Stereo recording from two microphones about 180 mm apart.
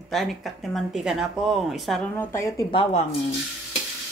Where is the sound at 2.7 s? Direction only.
30° left (ahead or behind).